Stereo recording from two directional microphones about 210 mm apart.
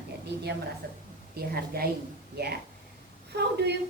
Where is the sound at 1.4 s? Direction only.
45° right (ahead or behind).